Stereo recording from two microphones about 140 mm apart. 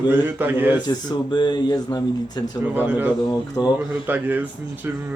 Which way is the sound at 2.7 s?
10° right (ahead or behind).